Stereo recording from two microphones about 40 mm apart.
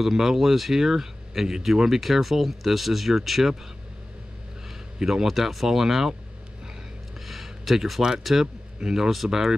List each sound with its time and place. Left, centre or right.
0.0 s speech: centre
5.0 s speech: centre
7.2 s a sound: centre
8.2 s speech: centre
8.7 s a man's voice: centre